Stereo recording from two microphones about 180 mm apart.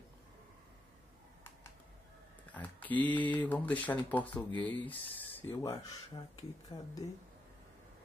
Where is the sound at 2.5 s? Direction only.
10° left (ahead or behind).